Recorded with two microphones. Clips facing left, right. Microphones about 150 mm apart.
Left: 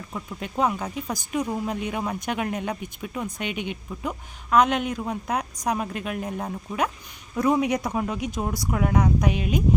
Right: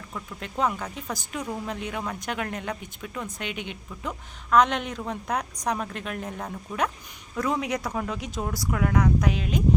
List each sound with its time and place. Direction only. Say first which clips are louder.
0.1 s speech: left 3 dB; 15° left (ahead or behind)